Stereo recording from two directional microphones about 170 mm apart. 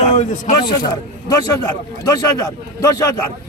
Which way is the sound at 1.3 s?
20° left (ahead or behind).